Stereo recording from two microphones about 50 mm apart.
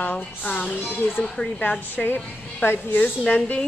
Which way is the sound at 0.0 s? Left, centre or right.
Left.